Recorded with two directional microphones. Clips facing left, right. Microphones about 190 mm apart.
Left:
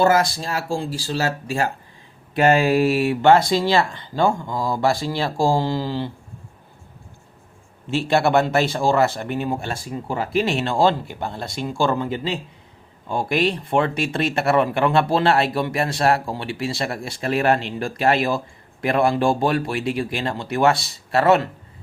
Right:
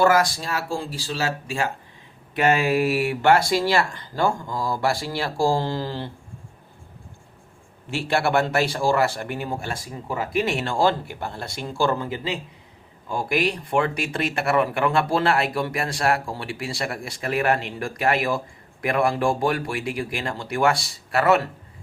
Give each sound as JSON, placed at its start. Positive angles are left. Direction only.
{"t": 0.0, "sound": "speech", "side_deg": 25}
{"t": 1.1, "sound": "speech", "side_deg": 40}
{"t": 7.9, "sound": "speech", "side_deg": 20}